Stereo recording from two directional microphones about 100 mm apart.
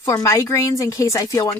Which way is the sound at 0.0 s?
30° left (ahead or behind).